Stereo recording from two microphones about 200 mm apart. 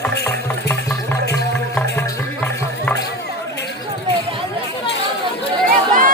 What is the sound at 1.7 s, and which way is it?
Music, 10° left (ahead or behind).